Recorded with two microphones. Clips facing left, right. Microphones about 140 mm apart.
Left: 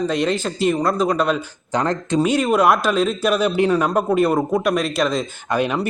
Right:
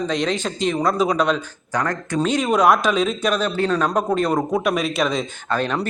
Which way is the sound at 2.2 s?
5° left (ahead or behind).